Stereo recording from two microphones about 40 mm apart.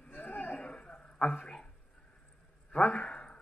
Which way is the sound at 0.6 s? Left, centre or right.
Left.